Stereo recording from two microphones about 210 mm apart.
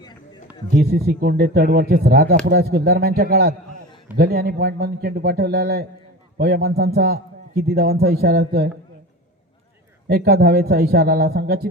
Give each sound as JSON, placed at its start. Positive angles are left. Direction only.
{"t": 0.8, "sound": "a man's voice", "side_deg": -50}
{"t": 10.1, "sound": "a man's voice", "side_deg": -50}